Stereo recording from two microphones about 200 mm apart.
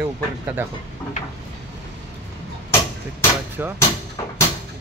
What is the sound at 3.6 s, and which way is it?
Speech, 10° right (ahead or behind).